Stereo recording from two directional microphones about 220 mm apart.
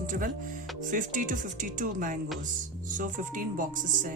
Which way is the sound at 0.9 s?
35° right (ahead or behind).